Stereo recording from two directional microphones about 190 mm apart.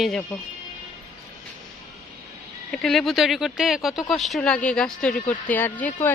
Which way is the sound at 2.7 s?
Centre (ahead or behind).